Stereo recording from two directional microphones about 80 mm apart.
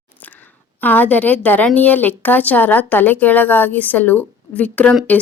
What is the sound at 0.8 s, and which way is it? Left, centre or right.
A woman's voice, left.